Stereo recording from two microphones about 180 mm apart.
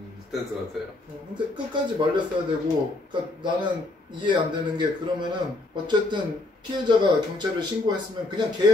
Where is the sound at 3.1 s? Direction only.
25° right (ahead or behind).